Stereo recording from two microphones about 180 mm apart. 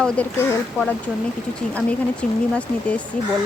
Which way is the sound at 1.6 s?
5° left (ahead or behind).